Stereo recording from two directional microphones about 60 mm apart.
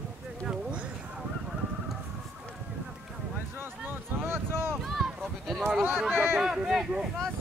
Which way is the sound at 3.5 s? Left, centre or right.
Right.